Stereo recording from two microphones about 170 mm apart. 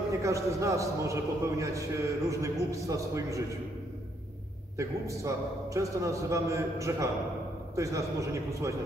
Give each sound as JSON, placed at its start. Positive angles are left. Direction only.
{"t": 0.2, "sound": "a man's voice", "side_deg": -20}
{"t": 4.7, "sound": "a man's voice", "side_deg": -20}